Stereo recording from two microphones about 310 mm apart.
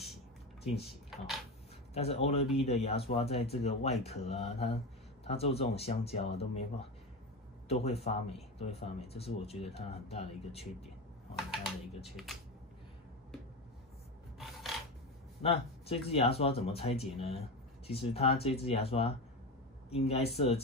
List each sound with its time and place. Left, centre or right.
1.1 s a sound: centre
2.0 s speech: centre
11.3 s speech: centre
14.4 s filing: centre
15.4 s speech: centre